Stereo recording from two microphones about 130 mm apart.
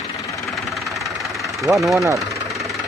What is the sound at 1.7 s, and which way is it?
Speech, centre (ahead or behind).